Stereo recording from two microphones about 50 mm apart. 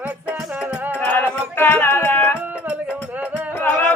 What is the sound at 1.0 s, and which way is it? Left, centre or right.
Music, left.